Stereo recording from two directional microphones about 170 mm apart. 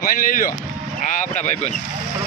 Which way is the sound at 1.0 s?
45° left (ahead or behind).